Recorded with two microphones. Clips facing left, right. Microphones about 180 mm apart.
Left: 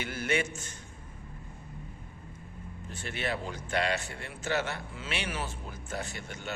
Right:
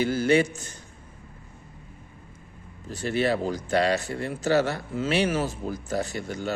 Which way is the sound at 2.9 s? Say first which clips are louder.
Right 10 dB; 35° right (ahead or behind).